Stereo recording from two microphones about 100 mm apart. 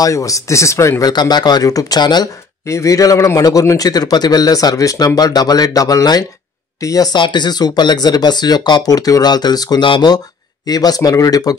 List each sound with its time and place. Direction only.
0.0 s a man's voice: 35° left (ahead or behind)
1.0 s speech: 45° left (ahead or behind)
2.6 s a man's voice: 30° left (ahead or behind)
7.2 s a man's voice: 50° left (ahead or behind)